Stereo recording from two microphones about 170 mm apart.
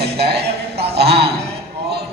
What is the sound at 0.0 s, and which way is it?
A man's voice, 75° right (ahead or behind).